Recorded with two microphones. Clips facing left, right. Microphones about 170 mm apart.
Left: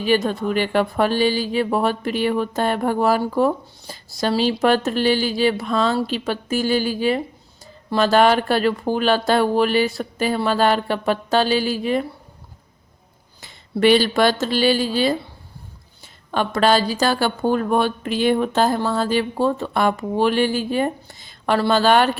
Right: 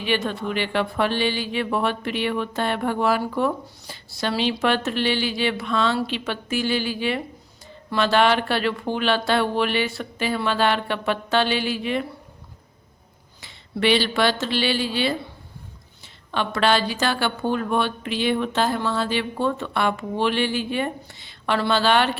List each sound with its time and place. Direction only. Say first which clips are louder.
0.0 s speech: left 5 dB; 40° left (ahead or behind)
13.4 s speech: left 6 dB; 45° left (ahead or behind)
16.3 s speech: left 3 dB; 45° left (ahead or behind)